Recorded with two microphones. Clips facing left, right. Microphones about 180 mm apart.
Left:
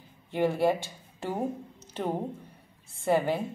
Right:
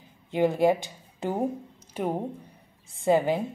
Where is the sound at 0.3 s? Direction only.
15° right (ahead or behind).